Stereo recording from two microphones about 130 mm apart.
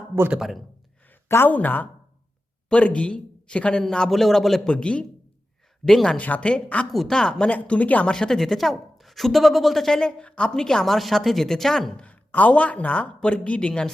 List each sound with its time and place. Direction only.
0.2 s speech: 5° right (ahead or behind)
1.3 s a man's voice: 15° left (ahead or behind)